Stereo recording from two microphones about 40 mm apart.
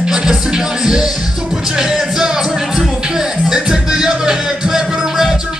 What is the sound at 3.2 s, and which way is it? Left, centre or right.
Music, centre.